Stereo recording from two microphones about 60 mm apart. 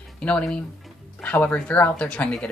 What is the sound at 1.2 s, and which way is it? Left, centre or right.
Speech, left.